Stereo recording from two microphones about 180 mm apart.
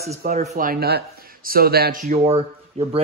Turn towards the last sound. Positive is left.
turn(degrees=-35)  # may be behind; listen again after turning